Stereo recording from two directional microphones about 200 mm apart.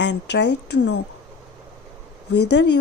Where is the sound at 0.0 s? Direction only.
60° left (ahead or behind).